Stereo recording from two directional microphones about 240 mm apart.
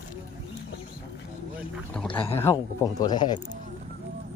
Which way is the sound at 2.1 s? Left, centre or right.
Left.